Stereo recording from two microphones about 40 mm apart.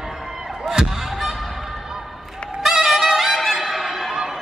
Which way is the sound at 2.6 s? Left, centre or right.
Centre.